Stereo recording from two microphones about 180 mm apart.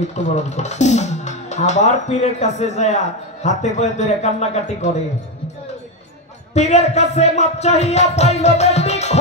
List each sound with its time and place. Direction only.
0.0 s speech: 40° left (ahead or behind)
6.5 s speech: 40° left (ahead or behind)